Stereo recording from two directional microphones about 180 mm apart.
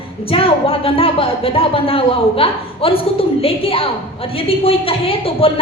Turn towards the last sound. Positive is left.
turn(degrees=30)  # may be behind; listen again after turning